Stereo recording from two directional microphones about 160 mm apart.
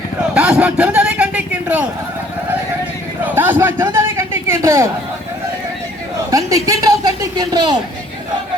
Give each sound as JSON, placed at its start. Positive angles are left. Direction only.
{"t": 0.3, "sound": "a sound", "side_deg": -5}
{"t": 3.2, "sound": "a man's voice", "side_deg": -10}
{"t": 6.3, "sound": "a woman's voice", "side_deg": -20}